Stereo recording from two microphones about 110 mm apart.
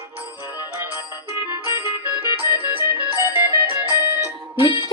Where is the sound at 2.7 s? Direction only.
15° right (ahead or behind).